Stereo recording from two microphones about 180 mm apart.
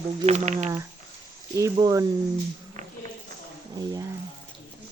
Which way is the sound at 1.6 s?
20° right (ahead or behind).